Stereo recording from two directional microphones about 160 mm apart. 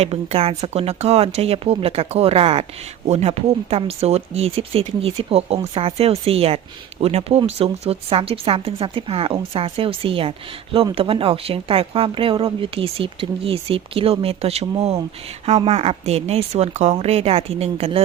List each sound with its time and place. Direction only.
0.0 s speech: 40° right (ahead or behind)